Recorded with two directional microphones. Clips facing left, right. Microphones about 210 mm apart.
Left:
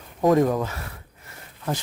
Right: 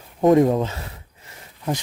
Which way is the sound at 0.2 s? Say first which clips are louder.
Right 4 dB; 25° right (ahead or behind).